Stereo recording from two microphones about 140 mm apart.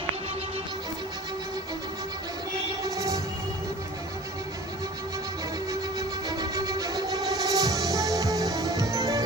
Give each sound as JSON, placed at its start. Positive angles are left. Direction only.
{"t": 2.9, "sound": "music", "side_deg": -25}
{"t": 6.0, "sound": "music", "side_deg": -30}